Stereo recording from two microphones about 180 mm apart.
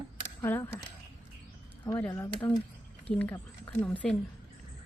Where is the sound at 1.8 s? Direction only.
15° left (ahead or behind).